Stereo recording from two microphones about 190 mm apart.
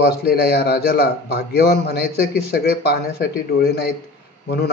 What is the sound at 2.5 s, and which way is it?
A man's voice, 60° left (ahead or behind).